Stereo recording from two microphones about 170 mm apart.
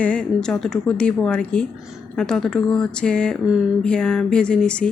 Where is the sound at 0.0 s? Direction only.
5° left (ahead or behind).